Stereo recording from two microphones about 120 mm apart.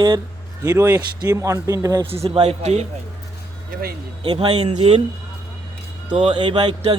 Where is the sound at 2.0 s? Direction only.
55° right (ahead or behind).